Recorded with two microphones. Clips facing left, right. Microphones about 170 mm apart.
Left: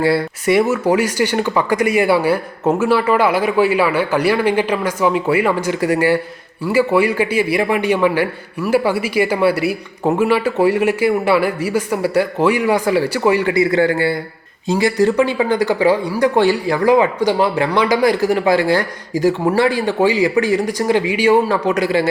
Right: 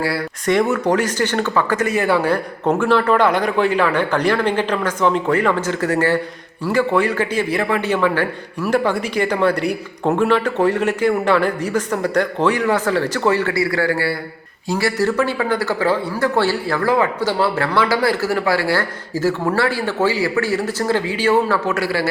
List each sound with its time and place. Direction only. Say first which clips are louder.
0.0 s speech: left 6 dB; 25° left (ahead or behind)
0.4 s speech: left 1 dB; 5° left (ahead or behind)